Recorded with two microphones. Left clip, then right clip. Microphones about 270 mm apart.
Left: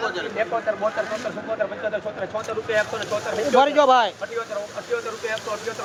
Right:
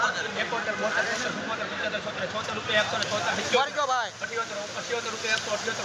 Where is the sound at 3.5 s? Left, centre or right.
Left.